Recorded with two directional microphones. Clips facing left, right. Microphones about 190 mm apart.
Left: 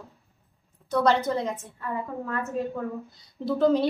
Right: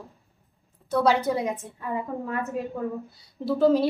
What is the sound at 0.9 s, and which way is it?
Speech, 5° right (ahead or behind).